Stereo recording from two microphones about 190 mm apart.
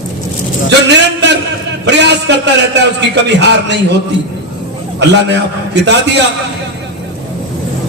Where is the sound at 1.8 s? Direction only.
65° right (ahead or behind).